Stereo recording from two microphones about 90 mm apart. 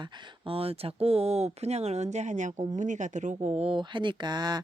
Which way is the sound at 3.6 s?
70° right (ahead or behind).